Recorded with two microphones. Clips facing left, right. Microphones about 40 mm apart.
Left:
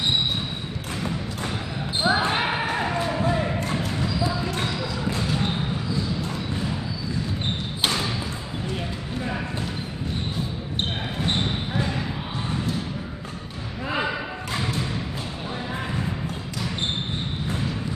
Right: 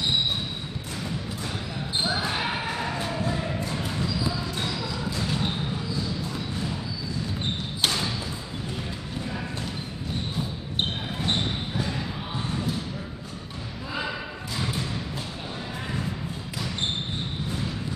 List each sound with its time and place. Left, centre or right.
2.0 s basketball bounce: left
2.7 s basketball bounce: centre
7.8 s a sound: centre
11.1 s basketball bounce: centre